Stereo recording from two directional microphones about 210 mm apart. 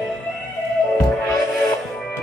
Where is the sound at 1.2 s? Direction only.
Centre (ahead or behind).